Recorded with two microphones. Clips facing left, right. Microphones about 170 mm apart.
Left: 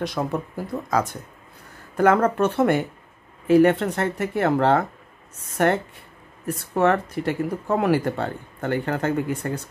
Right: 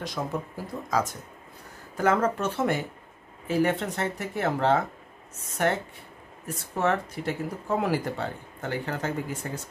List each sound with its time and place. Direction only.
0.2 s speech: 65° left (ahead or behind)